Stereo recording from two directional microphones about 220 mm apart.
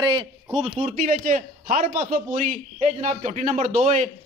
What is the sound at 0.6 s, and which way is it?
A man's voice, 35° right (ahead or behind).